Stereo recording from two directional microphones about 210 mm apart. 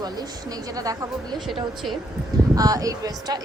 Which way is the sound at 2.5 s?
15° right (ahead or behind).